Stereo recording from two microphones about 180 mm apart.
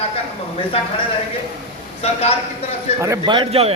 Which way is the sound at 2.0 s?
35° left (ahead or behind).